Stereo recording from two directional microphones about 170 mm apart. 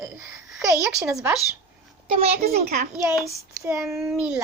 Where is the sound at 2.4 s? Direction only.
65° right (ahead or behind).